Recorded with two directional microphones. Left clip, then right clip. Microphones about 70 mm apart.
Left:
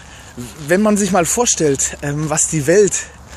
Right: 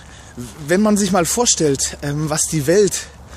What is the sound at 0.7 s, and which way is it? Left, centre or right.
Speech, centre.